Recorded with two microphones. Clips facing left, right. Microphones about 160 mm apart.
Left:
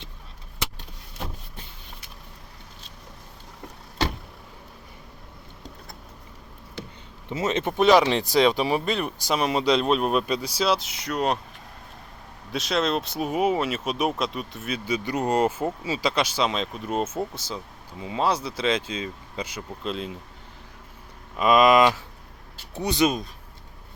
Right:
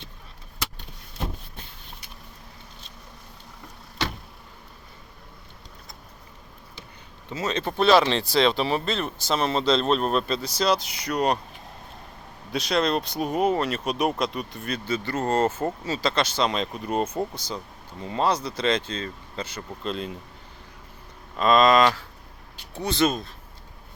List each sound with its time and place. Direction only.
7.3 s speech: 20° left (ahead or behind); by 11.3 s centre (ahead or behind)
12.5 s speech: centre (ahead or behind)
21.3 s speech: 10° left (ahead or behind)